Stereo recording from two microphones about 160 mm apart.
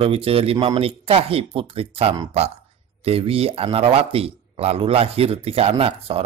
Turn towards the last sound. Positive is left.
turn(degrees=-40)  # may be behind; listen again after turning